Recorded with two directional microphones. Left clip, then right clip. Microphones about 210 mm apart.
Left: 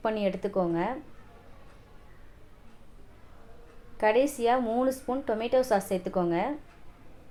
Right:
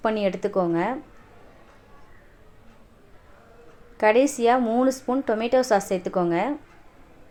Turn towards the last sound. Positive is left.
turn(degrees=-35)  # may be behind; listen again after turning